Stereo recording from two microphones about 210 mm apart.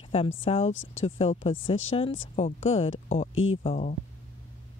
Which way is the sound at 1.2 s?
25° left (ahead or behind).